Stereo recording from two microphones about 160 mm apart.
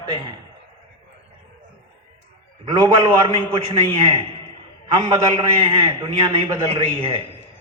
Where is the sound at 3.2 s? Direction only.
35° right (ahead or behind).